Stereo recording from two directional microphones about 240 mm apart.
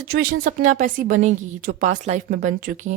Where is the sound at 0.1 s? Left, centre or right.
Right.